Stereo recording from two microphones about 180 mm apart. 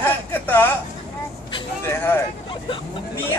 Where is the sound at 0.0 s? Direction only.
10° left (ahead or behind).